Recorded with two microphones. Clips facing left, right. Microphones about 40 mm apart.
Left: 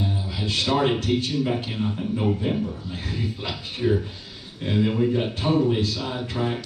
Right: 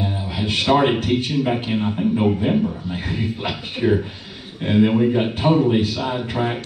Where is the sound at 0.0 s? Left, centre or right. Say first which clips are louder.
Right 4 dB; right.